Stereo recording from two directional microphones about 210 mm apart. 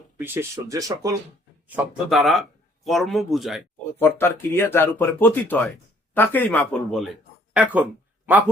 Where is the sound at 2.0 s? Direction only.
Centre (ahead or behind).